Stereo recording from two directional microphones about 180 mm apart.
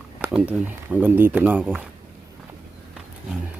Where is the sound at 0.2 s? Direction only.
10° right (ahead or behind).